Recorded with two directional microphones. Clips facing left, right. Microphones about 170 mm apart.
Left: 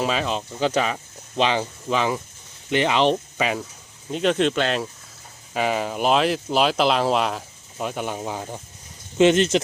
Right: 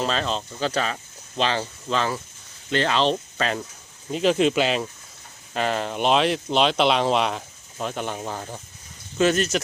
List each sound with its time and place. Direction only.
0.0 s speech: 10° left (ahead or behind)
4.1 s speech: centre (ahead or behind)
5.5 s speech: 10° left (ahead or behind); by 9.6 s 25° left (ahead or behind)